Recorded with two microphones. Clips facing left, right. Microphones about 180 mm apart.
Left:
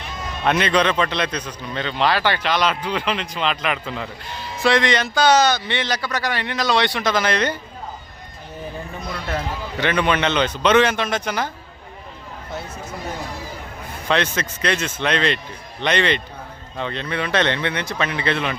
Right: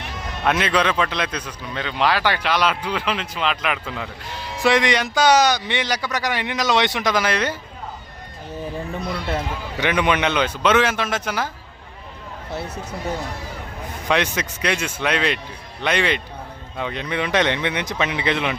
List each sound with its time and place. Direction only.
0.4 s a man's voice: 5° right (ahead or behind)
4.6 s speech: 15° right (ahead or behind)
9.8 s speech: 15° right (ahead or behind)
14.1 s speech: 15° right (ahead or behind)